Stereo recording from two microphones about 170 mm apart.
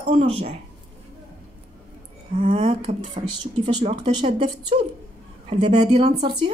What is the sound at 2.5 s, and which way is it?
Speech, 35° right (ahead or behind).